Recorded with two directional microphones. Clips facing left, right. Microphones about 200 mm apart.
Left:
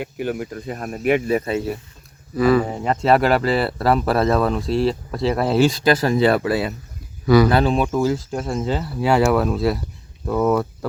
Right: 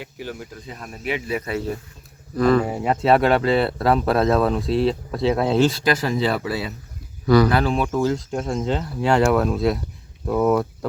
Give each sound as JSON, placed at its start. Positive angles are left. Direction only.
{"t": 0.0, "sound": "speech", "side_deg": 55}
{"t": 1.4, "sound": "speech", "side_deg": 25}
{"t": 2.3, "sound": "speech", "side_deg": 5}
{"t": 2.6, "sound": "speech", "side_deg": -5}
{"t": 5.8, "sound": "speech", "side_deg": 35}
{"t": 6.1, "sound": "speech", "side_deg": 60}
{"t": 7.3, "sound": "speech", "side_deg": 10}
{"t": 7.5, "sound": "speech", "side_deg": 20}
{"t": 7.9, "sound": "speech", "side_deg": 5}